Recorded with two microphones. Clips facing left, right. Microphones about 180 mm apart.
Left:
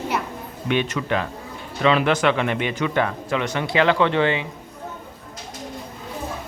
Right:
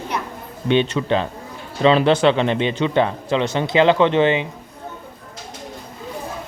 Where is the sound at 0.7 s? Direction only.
30° right (ahead or behind).